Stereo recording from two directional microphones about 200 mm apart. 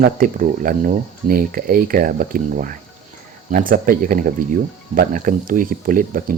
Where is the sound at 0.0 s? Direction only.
45° right (ahead or behind).